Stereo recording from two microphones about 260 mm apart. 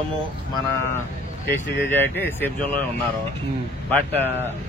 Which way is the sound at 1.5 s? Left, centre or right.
Centre.